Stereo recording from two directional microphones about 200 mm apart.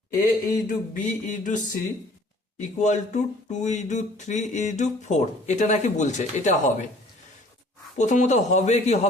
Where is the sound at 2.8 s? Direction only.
35° left (ahead or behind).